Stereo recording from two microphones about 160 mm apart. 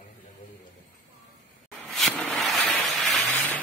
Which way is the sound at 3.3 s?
10° left (ahead or behind).